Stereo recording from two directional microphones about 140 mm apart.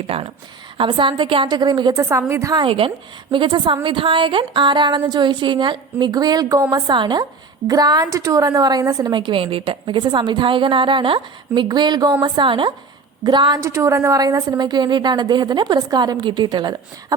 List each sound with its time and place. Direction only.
0.1 s a woman's voice: 45° right (ahead or behind); by 2.6 s 20° right (ahead or behind)
2.6 s a woman's voice: 40° right (ahead or behind)